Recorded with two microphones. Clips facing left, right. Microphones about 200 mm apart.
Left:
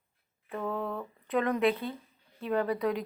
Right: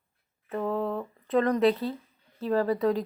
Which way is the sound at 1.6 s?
35° right (ahead or behind).